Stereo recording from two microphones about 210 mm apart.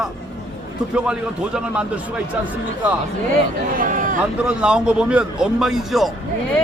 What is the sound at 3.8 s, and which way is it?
Speech, 40° right (ahead or behind).